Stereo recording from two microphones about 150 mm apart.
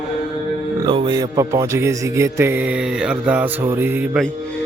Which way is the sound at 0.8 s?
30° right (ahead or behind).